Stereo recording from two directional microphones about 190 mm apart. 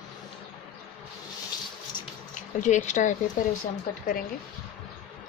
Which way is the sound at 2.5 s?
40° left (ahead or behind).